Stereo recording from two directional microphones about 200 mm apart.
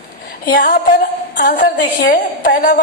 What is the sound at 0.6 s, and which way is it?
A woman's voice, 45° left (ahead or behind).